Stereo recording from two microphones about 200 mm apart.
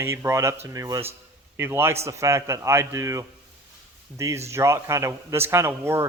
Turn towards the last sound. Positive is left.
turn(degrees=-15)  # may be behind; listen again after turning